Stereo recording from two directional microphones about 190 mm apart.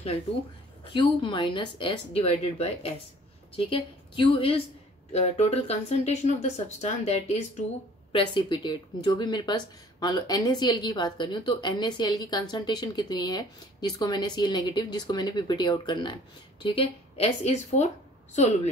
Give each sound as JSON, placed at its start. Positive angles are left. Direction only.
{"t": 0.8, "sound": "speech", "side_deg": 25}
{"t": 8.1, "sound": "speech", "side_deg": 25}